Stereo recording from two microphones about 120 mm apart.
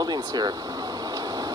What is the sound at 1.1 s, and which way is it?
Vehicle, 30° right (ahead or behind).